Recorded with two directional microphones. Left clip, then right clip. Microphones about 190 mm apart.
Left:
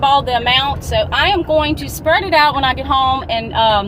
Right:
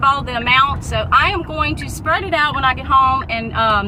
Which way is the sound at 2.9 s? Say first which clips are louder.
Right 3 dB; 60° left (ahead or behind).